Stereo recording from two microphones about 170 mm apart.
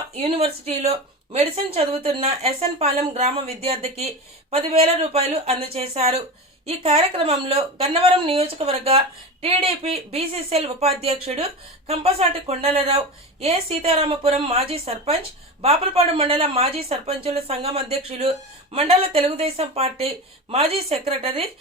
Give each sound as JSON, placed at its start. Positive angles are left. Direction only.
{"t": 0.2, "sound": "a woman's voice", "side_deg": -35}